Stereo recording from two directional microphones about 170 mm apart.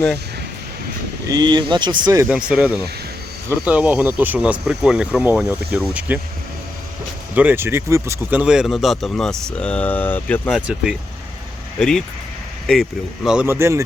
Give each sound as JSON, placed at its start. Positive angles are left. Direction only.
{"t": 1.3, "sound": "speech", "side_deg": -25}
{"t": 2.3, "sound": "speech", "side_deg": -5}
{"t": 7.3, "sound": "speech", "side_deg": -10}
{"t": 10.5, "sound": "speech", "side_deg": -5}